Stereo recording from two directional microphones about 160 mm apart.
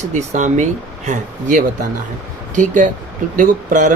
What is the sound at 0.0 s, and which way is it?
Speech, 50° right (ahead or behind).